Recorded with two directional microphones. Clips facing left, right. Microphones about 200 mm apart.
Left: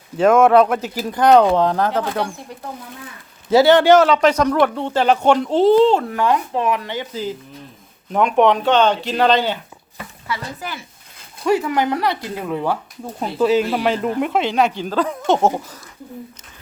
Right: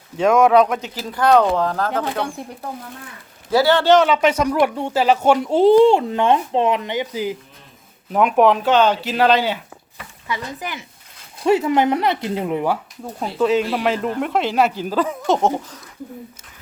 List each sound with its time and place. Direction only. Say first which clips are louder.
0.2 s speech: left 2 dB; centre (ahead or behind)
0.9 s a man's voice: left 3 dB; 15° left (ahead or behind)
3.5 s a man's voice: left 4 dB; 20° left (ahead or behind)
3.9 s speech: left 2 dB; centre (ahead or behind)
10.2 s speech: right 1 dB; 15° right (ahead or behind)
13.1 s speech: left 1 dB; centre (ahead or behind)